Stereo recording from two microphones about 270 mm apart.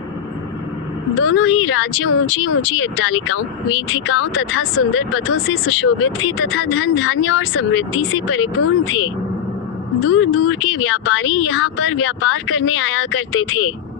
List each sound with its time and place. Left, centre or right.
1.2 s speech: left
10.1 s speech: left